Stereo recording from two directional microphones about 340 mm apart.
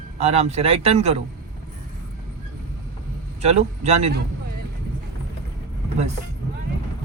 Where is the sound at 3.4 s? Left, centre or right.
Centre.